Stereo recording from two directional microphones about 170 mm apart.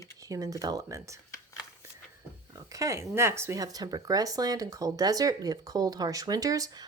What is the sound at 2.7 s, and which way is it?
Speech, 20° right (ahead or behind).